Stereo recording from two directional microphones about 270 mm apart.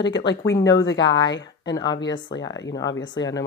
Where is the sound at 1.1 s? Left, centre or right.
Left.